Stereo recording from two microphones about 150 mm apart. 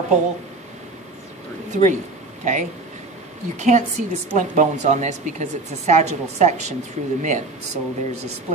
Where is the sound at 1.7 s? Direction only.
55° right (ahead or behind).